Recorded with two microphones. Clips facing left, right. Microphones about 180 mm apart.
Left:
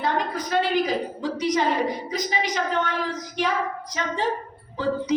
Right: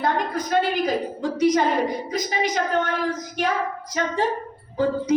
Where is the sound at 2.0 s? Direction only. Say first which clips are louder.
Right 2 dB; 50° right (ahead or behind).